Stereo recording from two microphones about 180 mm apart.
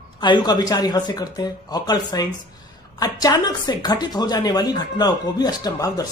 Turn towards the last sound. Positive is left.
turn(degrees=20)  # may be behind; listen again after turning